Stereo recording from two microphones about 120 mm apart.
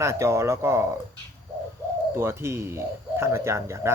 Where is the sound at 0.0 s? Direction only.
25° right (ahead or behind).